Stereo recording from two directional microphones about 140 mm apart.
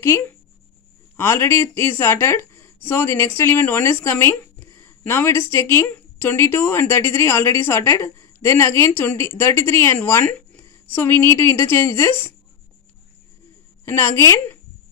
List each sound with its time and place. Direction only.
0.0 s speech: 15° left (ahead or behind)
13.8 s speech: 15° left (ahead or behind)